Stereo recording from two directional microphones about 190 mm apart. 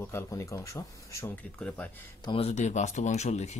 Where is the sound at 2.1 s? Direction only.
25° left (ahead or behind).